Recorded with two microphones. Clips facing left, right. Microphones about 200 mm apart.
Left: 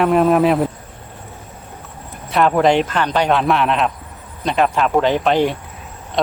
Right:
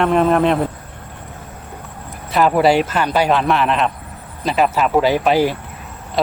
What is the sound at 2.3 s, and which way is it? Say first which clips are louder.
A man's voice: even; 5° right (ahead or behind).